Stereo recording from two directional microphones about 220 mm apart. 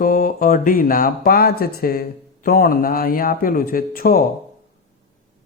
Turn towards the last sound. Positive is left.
turn(degrees=40)  # may be behind; listen again after turning